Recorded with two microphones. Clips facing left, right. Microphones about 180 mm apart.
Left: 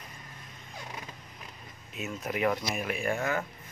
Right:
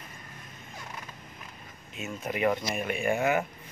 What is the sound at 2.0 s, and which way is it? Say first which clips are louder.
Speech: right 1 dB; centre (ahead or behind).